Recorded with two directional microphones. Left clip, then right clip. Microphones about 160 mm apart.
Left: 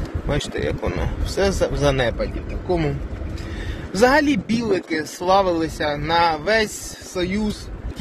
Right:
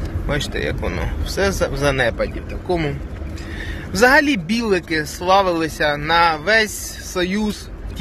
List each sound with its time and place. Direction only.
0.3 s speech: 20° left (ahead or behind)
7.2 s speech: centre (ahead or behind)